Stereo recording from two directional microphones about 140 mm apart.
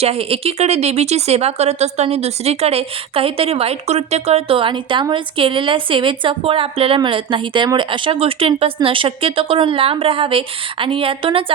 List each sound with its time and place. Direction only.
0.0 s speech: 45° right (ahead or behind)